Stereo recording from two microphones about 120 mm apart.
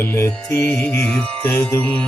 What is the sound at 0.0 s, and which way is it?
Music, 20° left (ahead or behind).